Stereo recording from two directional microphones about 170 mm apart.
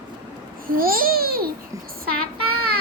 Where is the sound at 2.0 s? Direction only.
60° right (ahead or behind).